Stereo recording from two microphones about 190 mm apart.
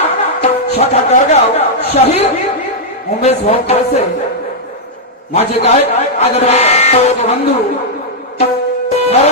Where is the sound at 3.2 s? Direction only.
35° left (ahead or behind).